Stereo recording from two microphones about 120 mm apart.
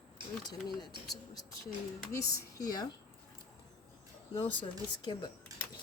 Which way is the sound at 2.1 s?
30° left (ahead or behind).